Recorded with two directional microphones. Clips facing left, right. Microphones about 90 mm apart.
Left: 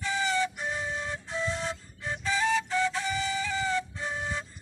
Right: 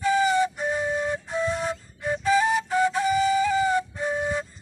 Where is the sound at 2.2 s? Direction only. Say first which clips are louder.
Right 6 dB; 25° right (ahead or behind).